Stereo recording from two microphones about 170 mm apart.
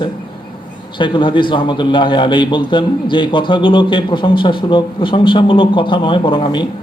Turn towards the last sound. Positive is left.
turn(degrees=30)  # may be behind; listen again after turning